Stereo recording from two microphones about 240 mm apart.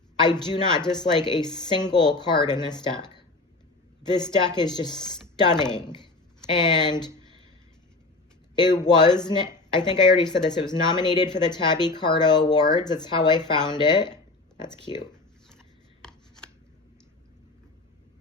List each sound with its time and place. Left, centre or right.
0.2 s speech: centre
8.5 s speech: centre
16.0 s rub: centre